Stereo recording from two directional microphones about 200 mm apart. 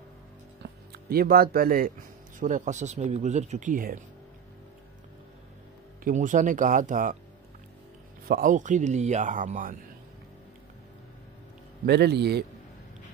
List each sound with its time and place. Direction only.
0.6 s speech: 50° right (ahead or behind)
6.0 s speech: 40° right (ahead or behind)
8.3 s speech: 40° right (ahead or behind)
11.8 s a man's voice: 55° right (ahead or behind)